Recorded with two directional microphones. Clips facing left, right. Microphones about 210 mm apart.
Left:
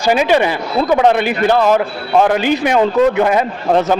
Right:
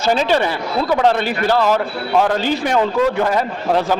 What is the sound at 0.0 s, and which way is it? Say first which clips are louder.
A man's voice: left 3 dB; 10° left (ahead or behind).